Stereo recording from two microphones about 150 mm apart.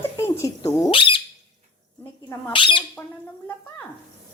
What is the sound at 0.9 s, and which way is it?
Speech, 35° left (ahead or behind).